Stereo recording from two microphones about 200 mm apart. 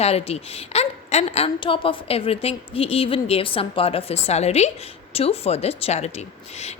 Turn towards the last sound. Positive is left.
turn(degrees=30)  # may be behind; listen again after turning